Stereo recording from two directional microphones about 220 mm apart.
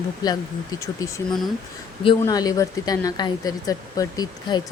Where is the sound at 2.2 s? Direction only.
15° left (ahead or behind).